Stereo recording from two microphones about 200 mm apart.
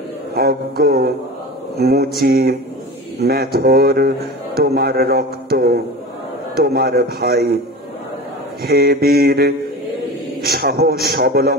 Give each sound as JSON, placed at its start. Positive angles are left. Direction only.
{"t": 0.3, "sound": "a man's voice", "side_deg": -50}
{"t": 8.6, "sound": "a man's voice", "side_deg": -50}